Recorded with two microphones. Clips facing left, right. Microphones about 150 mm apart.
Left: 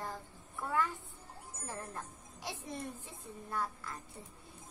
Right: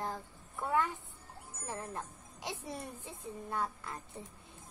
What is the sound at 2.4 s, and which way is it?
A woman's voice, 15° right (ahead or behind).